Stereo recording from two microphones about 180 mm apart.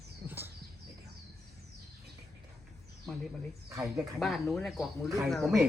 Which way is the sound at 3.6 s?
15° right (ahead or behind).